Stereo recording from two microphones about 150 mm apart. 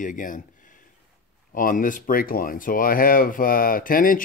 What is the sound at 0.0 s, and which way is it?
Speech, 60° left (ahead or behind).